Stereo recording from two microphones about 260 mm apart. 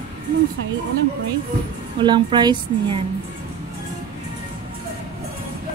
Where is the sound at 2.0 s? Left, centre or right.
Centre.